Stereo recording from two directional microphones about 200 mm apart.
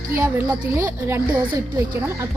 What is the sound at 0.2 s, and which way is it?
Speech, 15° right (ahead or behind).